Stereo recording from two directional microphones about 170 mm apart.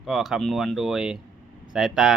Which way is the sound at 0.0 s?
Centre (ahead or behind).